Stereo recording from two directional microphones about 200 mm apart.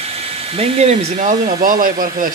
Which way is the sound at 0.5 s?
30° right (ahead or behind).